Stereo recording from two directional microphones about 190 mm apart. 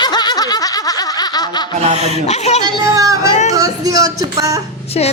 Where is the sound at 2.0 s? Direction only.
35° left (ahead or behind).